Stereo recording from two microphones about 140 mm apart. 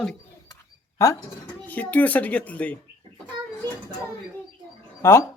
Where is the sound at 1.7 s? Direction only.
10° left (ahead or behind).